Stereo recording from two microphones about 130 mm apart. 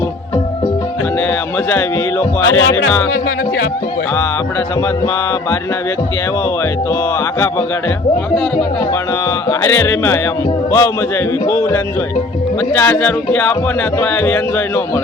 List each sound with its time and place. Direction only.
1.7 s speech: 20° left (ahead or behind)
9.5 s speech: 20° left (ahead or behind)
12.7 s speech: 15° left (ahead or behind)